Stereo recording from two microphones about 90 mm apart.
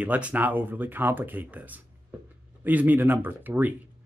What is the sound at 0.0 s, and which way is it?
Speech, 15° right (ahead or behind).